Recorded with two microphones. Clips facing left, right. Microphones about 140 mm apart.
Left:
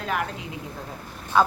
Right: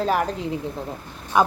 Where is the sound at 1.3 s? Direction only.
15° right (ahead or behind).